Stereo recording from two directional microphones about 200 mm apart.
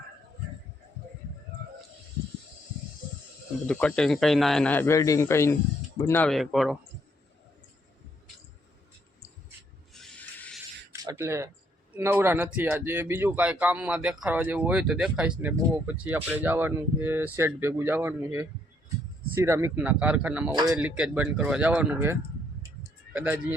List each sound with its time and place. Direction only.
3.7 s speech: 5° left (ahead or behind)
9.9 s wild animals: centre (ahead or behind)
10.9 s a sound: 15° right (ahead or behind)
11.9 s speech: 10° right (ahead or behind)
20.5 s speech: 20° right (ahead or behind)
20.7 s speech: 5° right (ahead or behind)